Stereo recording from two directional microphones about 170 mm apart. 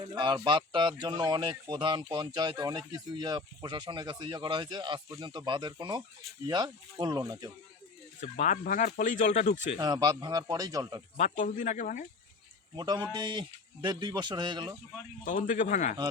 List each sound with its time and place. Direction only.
0.2 s speech: 25° right (ahead or behind)
8.2 s speech: 45° left (ahead or behind)
9.7 s speech: 20° right (ahead or behind)
11.2 s speech: 50° left (ahead or behind)
12.7 s speech: 25° right (ahead or behind)
15.2 s speech: 50° left (ahead or behind)